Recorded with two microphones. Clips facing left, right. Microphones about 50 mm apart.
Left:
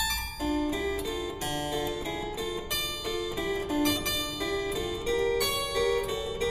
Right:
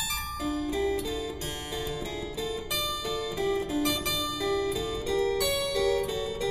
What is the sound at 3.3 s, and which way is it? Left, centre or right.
Music, left.